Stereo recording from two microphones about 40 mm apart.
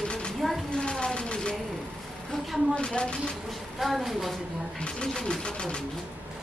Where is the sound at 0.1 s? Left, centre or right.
Left.